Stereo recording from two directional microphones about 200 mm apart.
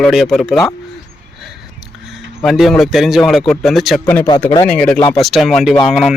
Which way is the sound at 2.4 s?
Centre (ahead or behind).